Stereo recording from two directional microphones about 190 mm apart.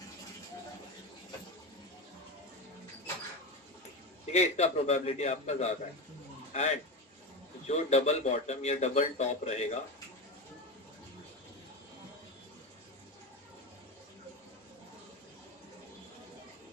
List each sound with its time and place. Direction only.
4.3 s a man's voice: 35° left (ahead or behind)